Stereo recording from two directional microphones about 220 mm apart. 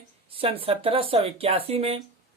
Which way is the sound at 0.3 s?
25° right (ahead or behind).